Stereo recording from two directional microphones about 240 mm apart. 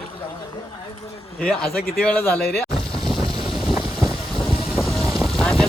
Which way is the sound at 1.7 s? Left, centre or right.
Left.